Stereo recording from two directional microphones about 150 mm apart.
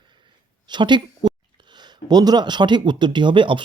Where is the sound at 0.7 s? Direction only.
30° right (ahead or behind).